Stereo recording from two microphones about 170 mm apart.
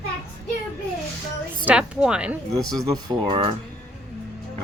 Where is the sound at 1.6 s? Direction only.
5° right (ahead or behind).